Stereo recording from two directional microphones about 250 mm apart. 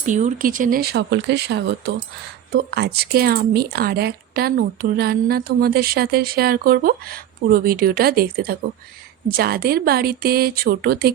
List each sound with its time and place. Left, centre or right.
0.0 s speech: right